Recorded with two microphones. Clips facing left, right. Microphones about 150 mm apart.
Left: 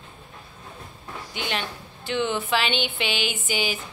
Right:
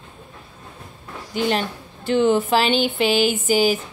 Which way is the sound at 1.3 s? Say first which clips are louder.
Right 9 dB; 40° right (ahead or behind).